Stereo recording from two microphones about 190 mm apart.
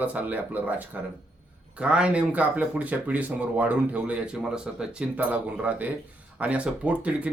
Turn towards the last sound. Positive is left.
turn(degrees=-5)  # may be behind; listen again after turning